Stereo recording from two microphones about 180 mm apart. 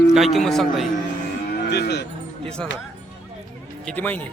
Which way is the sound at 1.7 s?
65° left (ahead or behind).